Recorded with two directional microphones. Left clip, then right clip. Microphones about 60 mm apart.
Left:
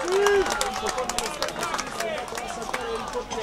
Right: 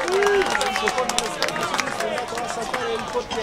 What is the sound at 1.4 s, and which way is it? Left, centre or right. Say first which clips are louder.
Run: right 6 dB; centre.